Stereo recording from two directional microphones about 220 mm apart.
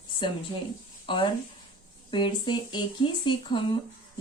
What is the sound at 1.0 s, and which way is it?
Speech, 20° left (ahead or behind).